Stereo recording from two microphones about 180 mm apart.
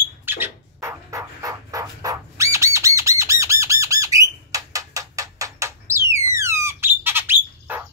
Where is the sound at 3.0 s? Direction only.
15° right (ahead or behind).